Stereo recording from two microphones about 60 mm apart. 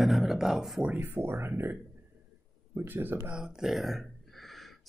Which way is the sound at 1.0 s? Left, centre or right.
Right.